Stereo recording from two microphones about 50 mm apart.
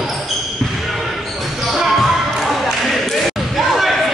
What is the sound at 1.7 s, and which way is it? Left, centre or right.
Basketball bounce, centre.